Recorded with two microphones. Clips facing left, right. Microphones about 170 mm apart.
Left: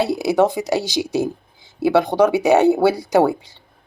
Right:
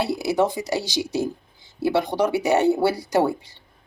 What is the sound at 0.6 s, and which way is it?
Speech, 90° left.